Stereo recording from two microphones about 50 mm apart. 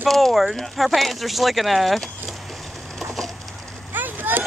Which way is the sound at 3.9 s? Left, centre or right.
Right.